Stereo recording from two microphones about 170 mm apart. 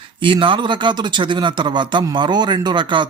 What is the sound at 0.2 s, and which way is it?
Speech, 30° right (ahead or behind).